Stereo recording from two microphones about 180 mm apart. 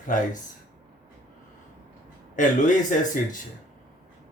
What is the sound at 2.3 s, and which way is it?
Speech, 45° left (ahead or behind).